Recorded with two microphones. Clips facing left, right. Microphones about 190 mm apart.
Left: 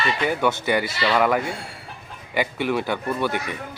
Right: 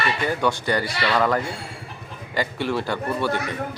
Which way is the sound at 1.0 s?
5° left (ahead or behind).